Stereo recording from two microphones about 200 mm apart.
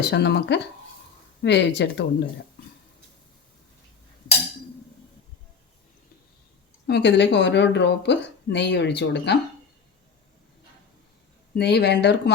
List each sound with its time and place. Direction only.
0.0 s a woman's voice: 60° left (ahead or behind)
6.8 s a woman's voice: 60° left (ahead or behind)
11.5 s a woman's voice: 55° left (ahead or behind)